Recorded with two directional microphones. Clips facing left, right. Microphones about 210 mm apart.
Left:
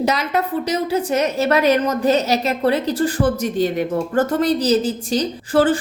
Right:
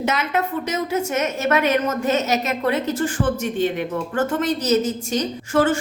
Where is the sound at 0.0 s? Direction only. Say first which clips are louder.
Left 2 dB; 35° left (ahead or behind).